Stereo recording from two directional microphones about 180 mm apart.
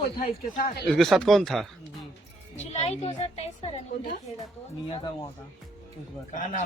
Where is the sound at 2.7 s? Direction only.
35° left (ahead or behind).